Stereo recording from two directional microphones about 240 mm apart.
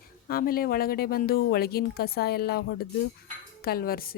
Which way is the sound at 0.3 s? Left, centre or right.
Left.